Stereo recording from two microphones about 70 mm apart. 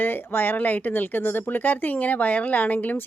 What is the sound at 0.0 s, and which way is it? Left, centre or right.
Speech, left.